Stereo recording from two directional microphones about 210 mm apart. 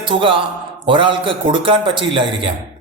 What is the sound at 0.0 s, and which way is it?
Speech, 25° right (ahead or behind).